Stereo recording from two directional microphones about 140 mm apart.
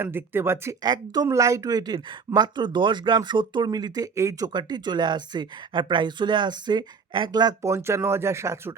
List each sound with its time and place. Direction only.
0.0 s speech: 15° right (ahead or behind)